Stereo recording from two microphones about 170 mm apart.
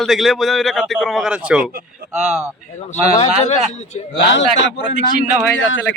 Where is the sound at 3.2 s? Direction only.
40° left (ahead or behind).